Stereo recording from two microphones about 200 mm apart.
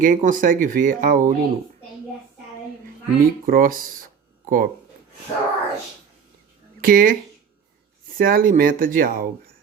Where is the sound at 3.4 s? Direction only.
45° right (ahead or behind).